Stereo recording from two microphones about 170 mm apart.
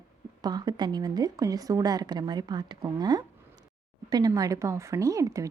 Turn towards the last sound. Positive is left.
turn(degrees=-20)  # may be behind; listen again after turning